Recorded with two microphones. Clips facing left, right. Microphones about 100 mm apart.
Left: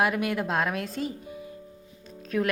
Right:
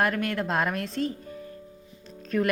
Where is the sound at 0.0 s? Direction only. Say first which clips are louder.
Even; 5° left (ahead or behind).